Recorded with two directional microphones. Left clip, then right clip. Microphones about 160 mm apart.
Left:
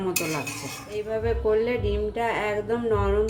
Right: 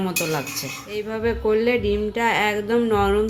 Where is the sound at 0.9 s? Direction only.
55° right (ahead or behind).